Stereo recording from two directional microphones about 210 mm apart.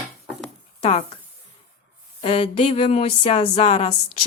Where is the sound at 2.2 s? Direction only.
25° left (ahead or behind).